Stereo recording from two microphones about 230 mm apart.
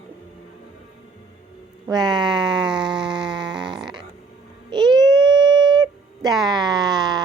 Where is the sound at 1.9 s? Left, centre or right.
Centre.